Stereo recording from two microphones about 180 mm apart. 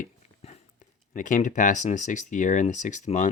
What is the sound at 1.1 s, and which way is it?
Speech, 45° left (ahead or behind).